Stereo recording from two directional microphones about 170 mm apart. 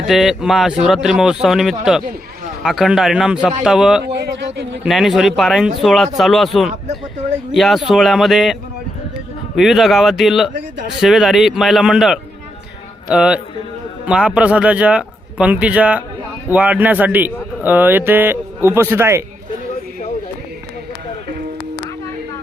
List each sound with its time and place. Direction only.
0.1 s speech: centre (ahead or behind)
4.0 s a sound: 75° right (ahead or behind)
4.8 s speech: centre (ahead or behind)
9.6 s a man's voice: centre (ahead or behind)